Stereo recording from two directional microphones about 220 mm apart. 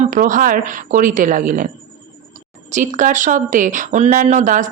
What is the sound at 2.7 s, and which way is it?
A woman's voice, 35° right (ahead or behind).